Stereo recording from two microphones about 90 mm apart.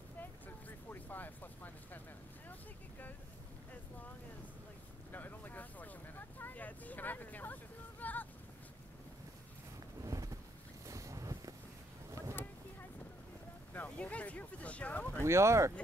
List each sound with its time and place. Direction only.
0.2 s vehicle: 20° left (ahead or behind)
5.1 s vehicle: 20° left (ahead or behind)
10.0 s boat: 40° right (ahead or behind)
13.7 s a sound: 15° left (ahead or behind)
15.1 s speech: 30° right (ahead or behind)